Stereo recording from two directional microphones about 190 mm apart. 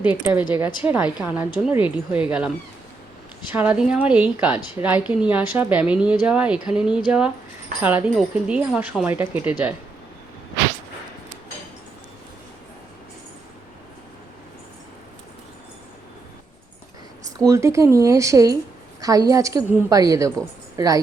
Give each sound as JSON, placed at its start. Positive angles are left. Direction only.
{"t": 0.0, "sound": "a woman's voice", "side_deg": -5}
{"t": 3.5, "sound": "a woman's voice", "side_deg": -10}
{"t": 17.5, "sound": "a woman's voice", "side_deg": -15}